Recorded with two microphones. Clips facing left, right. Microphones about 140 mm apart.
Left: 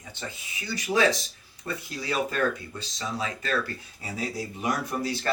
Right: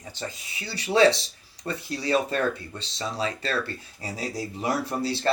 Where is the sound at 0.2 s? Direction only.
35° right (ahead or behind).